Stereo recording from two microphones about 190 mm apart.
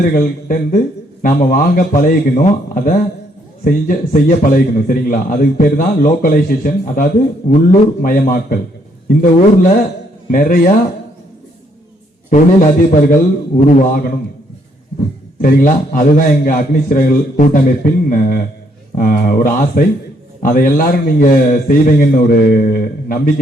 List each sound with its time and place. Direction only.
0.0 s a man's voice: 50° left (ahead or behind)
12.3 s a man's voice: 45° left (ahead or behind)
15.4 s a man's voice: 50° left (ahead or behind)